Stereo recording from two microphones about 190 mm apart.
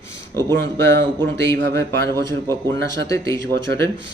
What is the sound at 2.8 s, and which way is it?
Speech, 70° right (ahead or behind).